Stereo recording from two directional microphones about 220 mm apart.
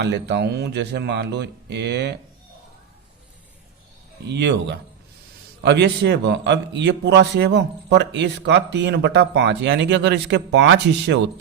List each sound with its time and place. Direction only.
0.0 s a man's voice: 50° right (ahead or behind)
4.3 s a man's voice: 50° right (ahead or behind)